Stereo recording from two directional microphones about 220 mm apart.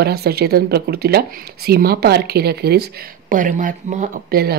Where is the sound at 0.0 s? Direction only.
45° right (ahead or behind).